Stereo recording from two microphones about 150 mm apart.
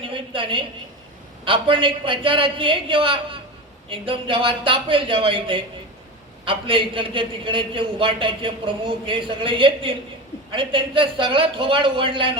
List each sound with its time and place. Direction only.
0.0 s a woman's voice: 35° right (ahead or behind)